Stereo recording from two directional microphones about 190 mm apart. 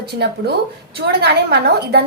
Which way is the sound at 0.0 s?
60° right (ahead or behind).